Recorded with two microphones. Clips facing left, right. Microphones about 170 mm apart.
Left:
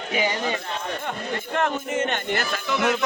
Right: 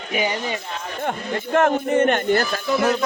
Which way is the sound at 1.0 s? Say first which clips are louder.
Right 4 dB; 50° right (ahead or behind).